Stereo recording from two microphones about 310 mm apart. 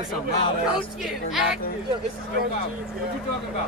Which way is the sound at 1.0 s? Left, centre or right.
Centre.